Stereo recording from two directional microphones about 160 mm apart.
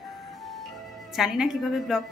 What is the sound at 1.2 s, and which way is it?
Speech, 5° right (ahead or behind).